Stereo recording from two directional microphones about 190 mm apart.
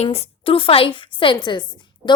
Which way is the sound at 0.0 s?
35° left (ahead or behind).